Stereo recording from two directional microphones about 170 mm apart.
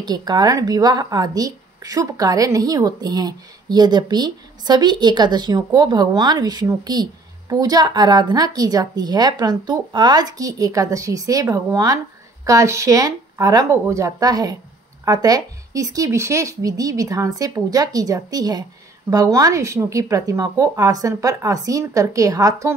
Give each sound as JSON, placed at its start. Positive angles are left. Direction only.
{"t": 0.0, "sound": "a woman's voice", "side_deg": -25}